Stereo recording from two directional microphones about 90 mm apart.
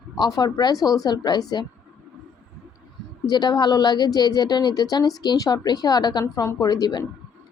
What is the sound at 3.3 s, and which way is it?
A woman's voice, 50° left (ahead or behind).